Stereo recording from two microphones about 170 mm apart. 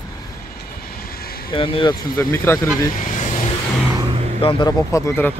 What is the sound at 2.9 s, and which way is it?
Vehicle, 45° left (ahead or behind).